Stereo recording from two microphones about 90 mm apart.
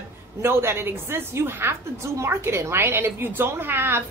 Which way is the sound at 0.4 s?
25° right (ahead or behind).